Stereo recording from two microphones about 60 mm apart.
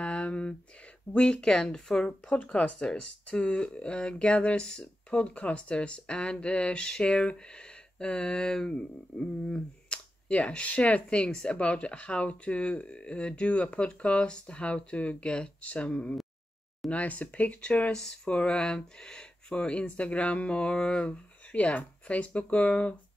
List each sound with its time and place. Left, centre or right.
0.0 s a sound: centre
1.1 s speech: centre
2.3 s speech: left
2.8 s speech: centre
17.9 s speech: centre